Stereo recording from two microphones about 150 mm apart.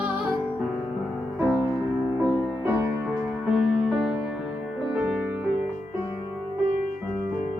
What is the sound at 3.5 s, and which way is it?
Music, centre (ahead or behind).